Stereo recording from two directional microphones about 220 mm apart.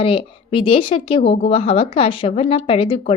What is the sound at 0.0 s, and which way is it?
A woman's voice, 25° left (ahead or behind).